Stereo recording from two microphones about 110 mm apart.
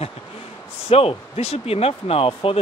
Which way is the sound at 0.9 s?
60° left (ahead or behind).